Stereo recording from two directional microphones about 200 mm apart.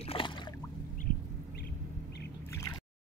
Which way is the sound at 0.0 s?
25° left (ahead or behind).